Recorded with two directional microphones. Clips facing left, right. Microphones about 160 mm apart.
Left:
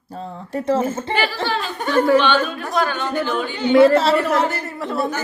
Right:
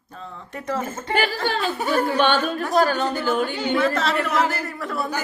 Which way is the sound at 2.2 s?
50° right (ahead or behind).